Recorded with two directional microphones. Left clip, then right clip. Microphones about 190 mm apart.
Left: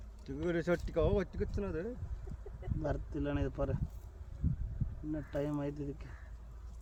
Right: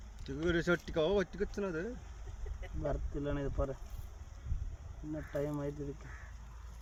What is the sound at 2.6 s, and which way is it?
Speech, 30° left (ahead or behind).